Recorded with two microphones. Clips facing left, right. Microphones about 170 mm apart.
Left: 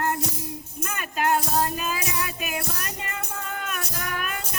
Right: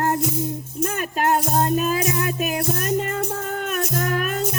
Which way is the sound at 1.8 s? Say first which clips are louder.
Right 7 dB; 50° right (ahead or behind).